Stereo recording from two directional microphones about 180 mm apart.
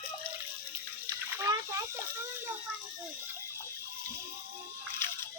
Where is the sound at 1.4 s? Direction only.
15° right (ahead or behind).